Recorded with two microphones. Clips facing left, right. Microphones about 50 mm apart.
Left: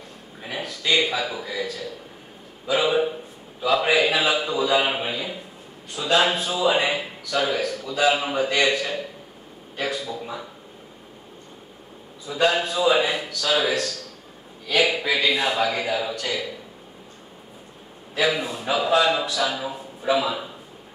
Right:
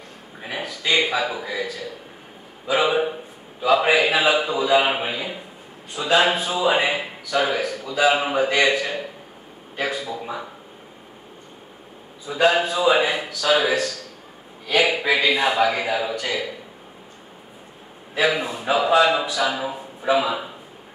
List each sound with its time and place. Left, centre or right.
0.4 s a man's voice: centre
12.3 s a man's voice: centre
18.1 s a man's voice: centre